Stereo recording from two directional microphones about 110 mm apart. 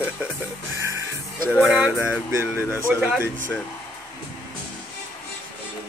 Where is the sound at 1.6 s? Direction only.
5° right (ahead or behind).